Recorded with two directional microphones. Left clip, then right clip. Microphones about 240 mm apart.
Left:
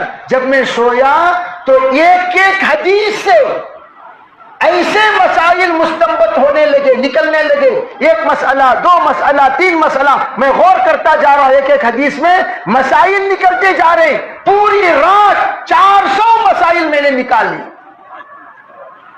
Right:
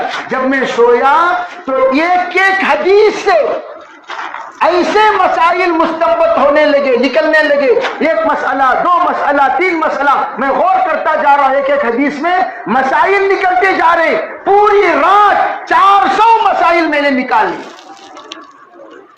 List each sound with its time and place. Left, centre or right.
0.3 s a man's voice: left
4.6 s a man's voice: left
8.0 s a man's voice: left